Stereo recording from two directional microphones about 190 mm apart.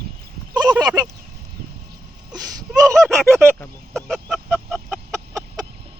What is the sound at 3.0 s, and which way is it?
Honk, 5° left (ahead or behind).